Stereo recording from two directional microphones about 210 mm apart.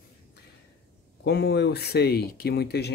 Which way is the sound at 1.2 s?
50° left (ahead or behind).